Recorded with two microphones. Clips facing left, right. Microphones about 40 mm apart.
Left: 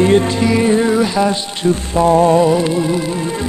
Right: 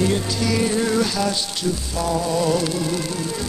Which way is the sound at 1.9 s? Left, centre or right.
Left.